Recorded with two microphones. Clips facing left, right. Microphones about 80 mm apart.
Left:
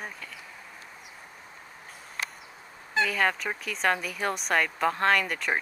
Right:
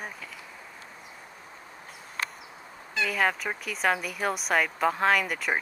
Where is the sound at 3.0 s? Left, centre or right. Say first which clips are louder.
Right 4 dB; centre.